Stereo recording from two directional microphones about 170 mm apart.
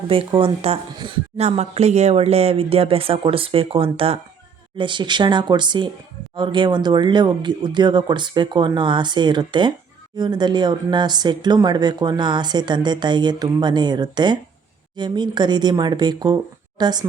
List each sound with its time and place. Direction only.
0.1 s speech: 30° right (ahead or behind)